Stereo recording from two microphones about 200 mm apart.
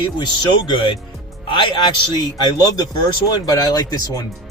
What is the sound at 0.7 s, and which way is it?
A man's voice, 25° left (ahead or behind).